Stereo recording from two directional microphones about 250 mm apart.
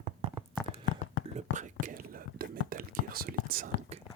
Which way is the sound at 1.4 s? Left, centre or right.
Right.